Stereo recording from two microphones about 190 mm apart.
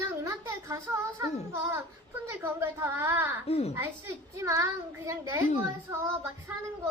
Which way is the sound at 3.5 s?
30° left (ahead or behind).